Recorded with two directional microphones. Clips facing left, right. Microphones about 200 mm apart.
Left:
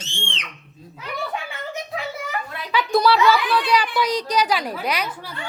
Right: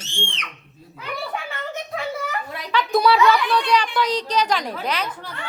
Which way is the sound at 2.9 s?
Centre (ahead or behind).